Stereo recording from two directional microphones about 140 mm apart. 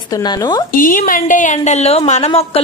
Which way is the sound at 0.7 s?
80° left.